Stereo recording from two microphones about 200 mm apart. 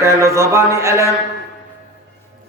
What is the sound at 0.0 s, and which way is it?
A man's voice, 15° right (ahead or behind).